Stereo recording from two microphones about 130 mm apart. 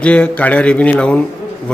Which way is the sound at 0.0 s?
10° left (ahead or behind).